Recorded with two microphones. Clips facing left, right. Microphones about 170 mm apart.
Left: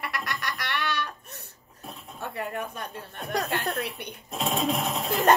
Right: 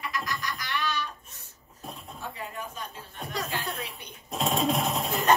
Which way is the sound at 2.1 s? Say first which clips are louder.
Left 7 dB; 65° left (ahead or behind).